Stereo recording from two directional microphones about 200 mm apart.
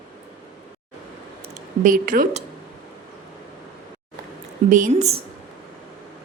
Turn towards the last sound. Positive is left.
turn(degrees=-40)  # may be behind; listen again after turning